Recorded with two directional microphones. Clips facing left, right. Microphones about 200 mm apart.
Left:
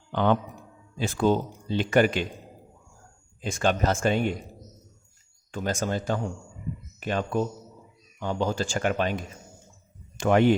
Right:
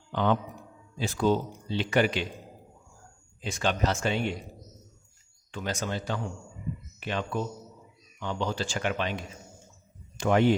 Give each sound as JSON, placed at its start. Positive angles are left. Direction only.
{"t": 0.1, "sound": "speech", "side_deg": 55}
{"t": 3.4, "sound": "speech", "side_deg": 50}
{"t": 5.5, "sound": "speech", "side_deg": 45}